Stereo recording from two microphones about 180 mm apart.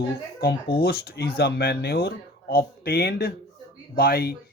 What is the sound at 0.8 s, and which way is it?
Speech, 60° left (ahead or behind).